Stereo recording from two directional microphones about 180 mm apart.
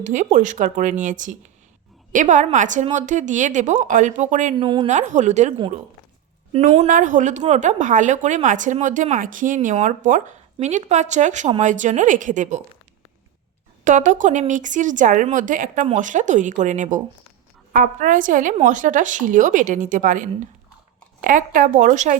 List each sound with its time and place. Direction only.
0.0 s speech: 45° right (ahead or behind)
4.5 s speech: 30° right (ahead or behind)
4.9 s a woman's voice: 40° right (ahead or behind)
13.8 s speech: 45° right (ahead or behind)